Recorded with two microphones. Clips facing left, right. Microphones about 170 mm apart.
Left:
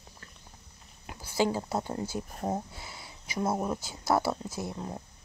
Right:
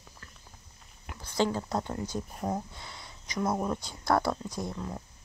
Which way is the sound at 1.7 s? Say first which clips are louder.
Even; 10° left (ahead or behind).